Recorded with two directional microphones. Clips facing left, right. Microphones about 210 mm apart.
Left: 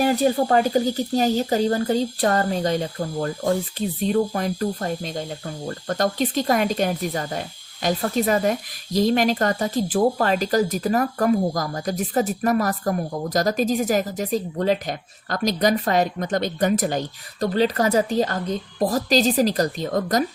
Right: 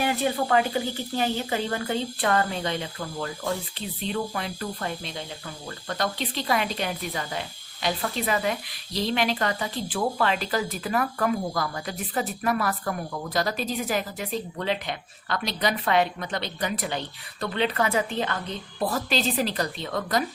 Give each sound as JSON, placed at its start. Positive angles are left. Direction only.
{"t": 0.0, "sound": "speech", "side_deg": 40}